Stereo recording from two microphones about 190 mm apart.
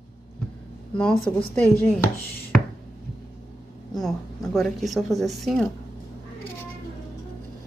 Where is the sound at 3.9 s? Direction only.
Centre (ahead or behind).